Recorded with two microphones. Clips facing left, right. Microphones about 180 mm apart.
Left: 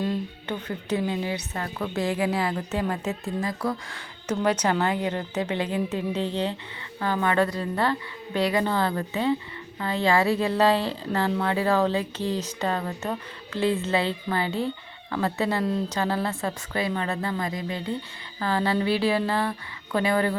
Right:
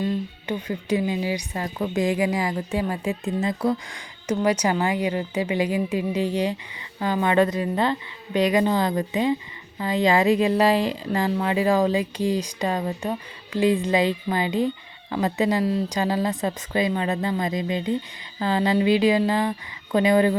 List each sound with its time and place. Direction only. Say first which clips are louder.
0.4 s speech: right 3 dB; 10° right (ahead or behind)
3.4 s speech: right 6 dB; 25° right (ahead or behind)